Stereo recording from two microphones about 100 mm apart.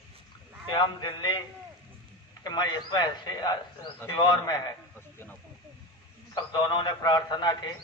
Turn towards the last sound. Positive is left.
turn(degrees=45)  # may be behind; listen again after turning